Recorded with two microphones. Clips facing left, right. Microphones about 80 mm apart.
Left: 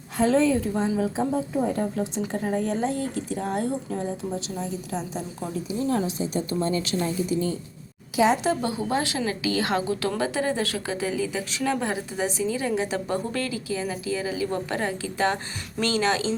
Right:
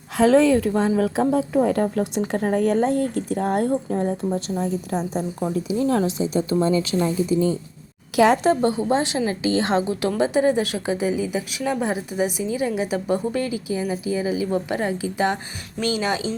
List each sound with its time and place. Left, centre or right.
0.2 s a woman's voice: right
5.6 s speech: right
8.1 s a woman's voice: right
8.4 s a woman's voice: right; by 16.3 s centre